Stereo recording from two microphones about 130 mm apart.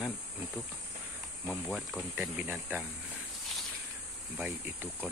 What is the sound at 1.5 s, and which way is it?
Speech, centre (ahead or behind).